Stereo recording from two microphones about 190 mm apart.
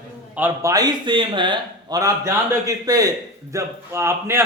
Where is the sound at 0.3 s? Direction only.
15° right (ahead or behind).